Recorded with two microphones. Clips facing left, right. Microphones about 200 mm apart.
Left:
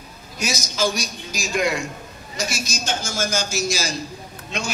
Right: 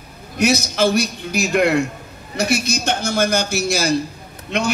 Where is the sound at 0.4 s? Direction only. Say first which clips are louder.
Right 7 dB; 60° right (ahead or behind).